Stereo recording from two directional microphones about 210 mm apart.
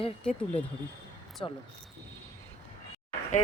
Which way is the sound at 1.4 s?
20° left (ahead or behind).